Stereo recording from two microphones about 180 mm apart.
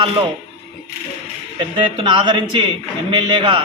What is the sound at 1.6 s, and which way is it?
Speech, 30° right (ahead or behind).